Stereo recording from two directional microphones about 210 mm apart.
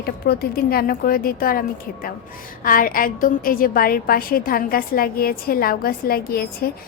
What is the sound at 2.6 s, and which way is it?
A woman's voice, 40° left (ahead or behind).